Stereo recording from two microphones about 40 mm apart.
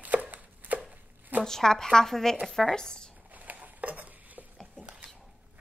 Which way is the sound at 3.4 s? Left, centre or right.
Right.